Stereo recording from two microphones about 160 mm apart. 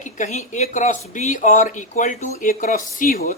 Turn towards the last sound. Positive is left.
turn(degrees=70)  # may be behind; listen again after turning